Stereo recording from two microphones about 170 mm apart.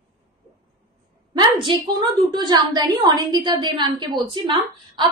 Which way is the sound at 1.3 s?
30° right (ahead or behind).